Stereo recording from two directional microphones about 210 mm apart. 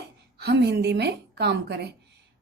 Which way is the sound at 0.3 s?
50° right (ahead or behind).